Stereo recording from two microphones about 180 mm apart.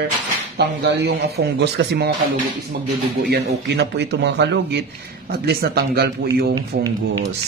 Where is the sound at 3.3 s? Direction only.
70° right (ahead or behind).